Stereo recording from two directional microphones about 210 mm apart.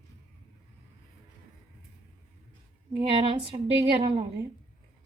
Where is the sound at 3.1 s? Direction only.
25° right (ahead or behind).